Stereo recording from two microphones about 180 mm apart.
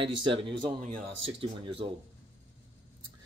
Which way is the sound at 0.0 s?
30° right (ahead or behind).